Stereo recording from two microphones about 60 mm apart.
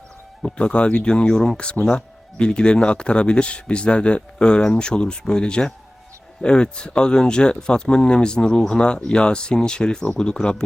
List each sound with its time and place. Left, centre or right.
0.4 s speech: centre